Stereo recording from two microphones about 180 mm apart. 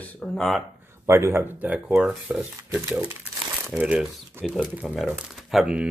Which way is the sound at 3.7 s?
5° right (ahead or behind).